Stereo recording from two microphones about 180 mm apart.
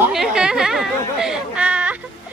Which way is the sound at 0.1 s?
5° right (ahead or behind).